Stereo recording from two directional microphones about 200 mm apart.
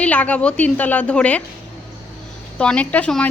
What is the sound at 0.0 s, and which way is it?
Speech, 5° left (ahead or behind).